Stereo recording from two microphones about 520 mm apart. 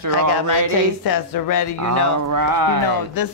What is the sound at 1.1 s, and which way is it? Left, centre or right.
Speech, left.